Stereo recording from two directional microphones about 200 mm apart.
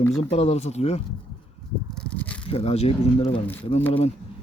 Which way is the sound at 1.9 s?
5° left (ahead or behind).